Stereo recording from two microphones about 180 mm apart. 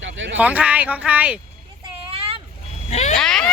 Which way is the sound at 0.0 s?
90° right.